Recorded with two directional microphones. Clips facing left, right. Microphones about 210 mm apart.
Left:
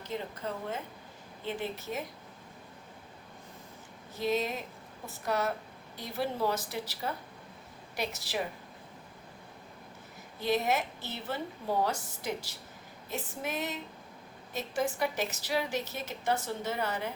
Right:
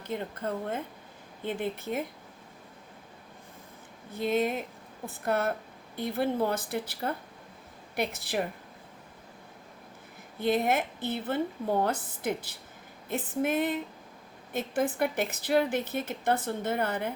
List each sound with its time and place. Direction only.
0.1 s a woman's voice: 55° right (ahead or behind)
4.1 s a woman's voice: 55° right (ahead or behind)
10.4 s a woman's voice: 55° right (ahead or behind)